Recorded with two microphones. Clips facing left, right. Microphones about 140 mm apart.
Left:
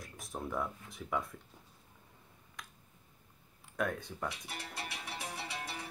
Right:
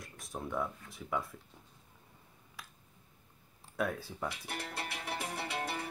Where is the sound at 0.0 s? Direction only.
Centre (ahead or behind).